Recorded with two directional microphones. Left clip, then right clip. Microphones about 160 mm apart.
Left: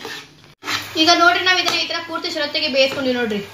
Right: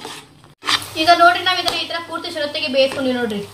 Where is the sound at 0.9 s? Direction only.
20° left (ahead or behind).